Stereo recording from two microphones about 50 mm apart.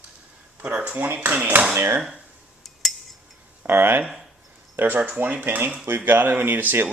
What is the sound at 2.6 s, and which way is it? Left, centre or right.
Cutlery, centre.